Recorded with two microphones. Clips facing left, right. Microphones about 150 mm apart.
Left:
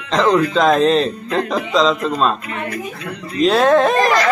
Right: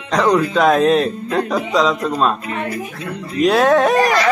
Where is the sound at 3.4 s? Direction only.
10° right (ahead or behind).